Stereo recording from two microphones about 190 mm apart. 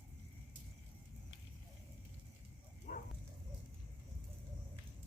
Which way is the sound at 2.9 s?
50° left (ahead or behind).